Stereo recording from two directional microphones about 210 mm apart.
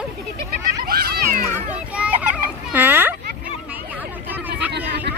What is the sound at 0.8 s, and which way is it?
Children playing, 45° right (ahead or behind).